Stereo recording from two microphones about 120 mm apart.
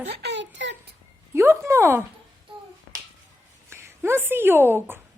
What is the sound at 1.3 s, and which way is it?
Speech, 20° right (ahead or behind).